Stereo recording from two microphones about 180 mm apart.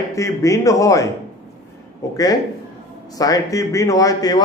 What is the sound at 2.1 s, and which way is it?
A man's voice, 20° left (ahead or behind).